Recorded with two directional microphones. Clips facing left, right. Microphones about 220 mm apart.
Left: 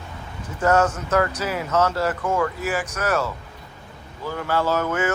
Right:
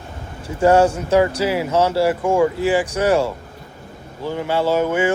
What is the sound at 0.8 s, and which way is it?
Speech, 10° right (ahead or behind).